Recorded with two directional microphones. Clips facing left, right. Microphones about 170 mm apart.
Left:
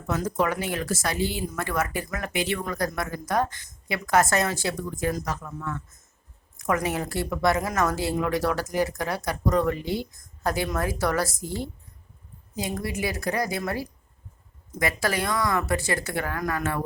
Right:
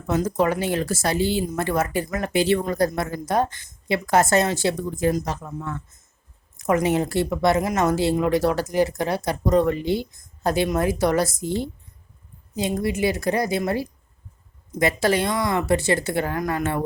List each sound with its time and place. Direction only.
0.1 s speech: 25° right (ahead or behind)